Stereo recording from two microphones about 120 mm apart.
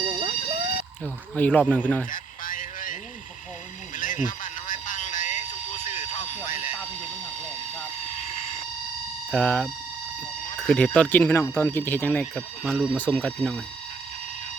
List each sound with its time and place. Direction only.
0.0 s emergency vehicle: 45° right (ahead or behind)
1.4 s speech: 10° left (ahead or behind)
2.6 s a sound: 90° left
8.0 s vehicle: 65° left (ahead or behind)
9.3 s speech: 10° left (ahead or behind)
10.7 s speech: 5° left (ahead or behind)
13.0 s speech: 10° left (ahead or behind)